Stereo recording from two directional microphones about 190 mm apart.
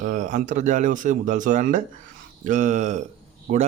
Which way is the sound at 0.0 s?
40° right (ahead or behind).